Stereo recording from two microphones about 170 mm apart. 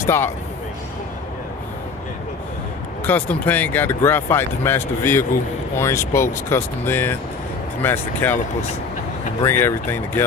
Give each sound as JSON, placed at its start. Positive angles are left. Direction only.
{"t": 0.0, "sound": "speech", "side_deg": 15}
{"t": 3.1, "sound": "speech", "side_deg": 10}
{"t": 9.4, "sound": "speech", "side_deg": 15}